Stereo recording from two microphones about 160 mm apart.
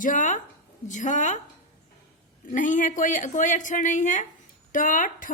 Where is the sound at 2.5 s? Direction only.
50° left (ahead or behind).